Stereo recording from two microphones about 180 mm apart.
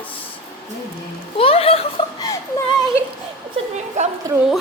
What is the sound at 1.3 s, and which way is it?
Speech, 30° left (ahead or behind).